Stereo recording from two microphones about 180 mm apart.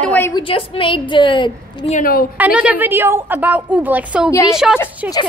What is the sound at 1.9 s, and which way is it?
Speech, 50° left (ahead or behind).